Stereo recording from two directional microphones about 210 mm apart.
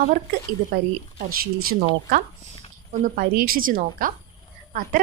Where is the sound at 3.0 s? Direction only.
45° right (ahead or behind).